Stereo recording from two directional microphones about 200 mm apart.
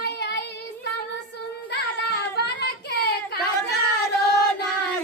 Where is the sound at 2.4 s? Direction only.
60° left (ahead or behind).